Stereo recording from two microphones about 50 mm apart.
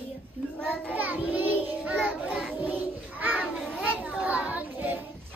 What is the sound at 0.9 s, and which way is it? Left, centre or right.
Child singing, right.